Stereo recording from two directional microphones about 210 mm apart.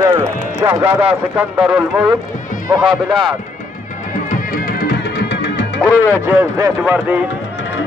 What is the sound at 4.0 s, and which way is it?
Music, 40° left (ahead or behind).